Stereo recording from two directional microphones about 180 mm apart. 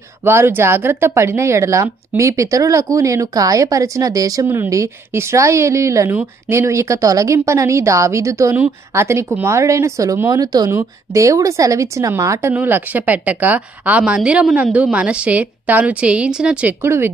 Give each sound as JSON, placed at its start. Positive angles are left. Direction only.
{"t": 0.2, "sound": "speech", "side_deg": -15}